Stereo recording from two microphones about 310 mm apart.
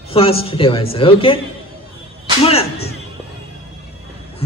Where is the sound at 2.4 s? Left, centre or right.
Centre.